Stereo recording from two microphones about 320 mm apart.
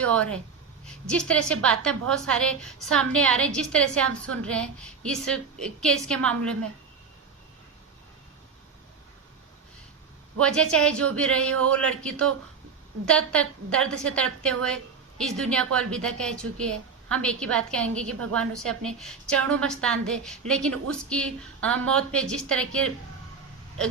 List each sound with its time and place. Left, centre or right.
0.0 s a woman's voice: centre
10.4 s a woman's voice: centre
18.1 s a woman's voice: right
18.3 s a woman's voice: centre